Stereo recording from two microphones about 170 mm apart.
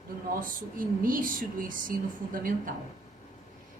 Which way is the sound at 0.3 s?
55° right (ahead or behind).